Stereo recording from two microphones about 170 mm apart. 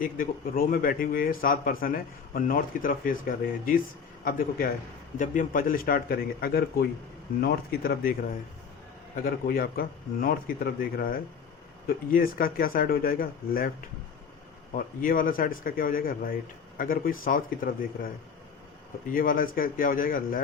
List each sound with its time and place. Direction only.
0.0 s a man's voice: 55° left (ahead or behind)
9.1 s a man's voice: 60° left (ahead or behind)
15.0 s a man's voice: 55° left (ahead or behind)
19.1 s a man's voice: 55° left (ahead or behind)